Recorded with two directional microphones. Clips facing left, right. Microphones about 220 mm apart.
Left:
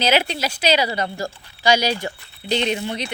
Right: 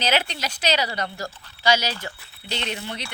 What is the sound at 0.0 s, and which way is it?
Speech, 10° left (ahead or behind).